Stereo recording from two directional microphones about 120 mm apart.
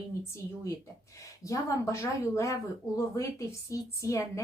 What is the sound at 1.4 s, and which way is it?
A woman's voice, 30° left (ahead or behind).